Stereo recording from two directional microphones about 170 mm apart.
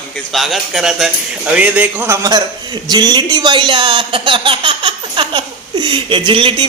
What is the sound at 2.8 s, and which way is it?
Speech, 25° right (ahead or behind).